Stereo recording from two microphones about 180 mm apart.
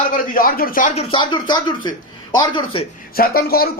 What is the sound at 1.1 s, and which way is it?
Speech, 25° left (ahead or behind).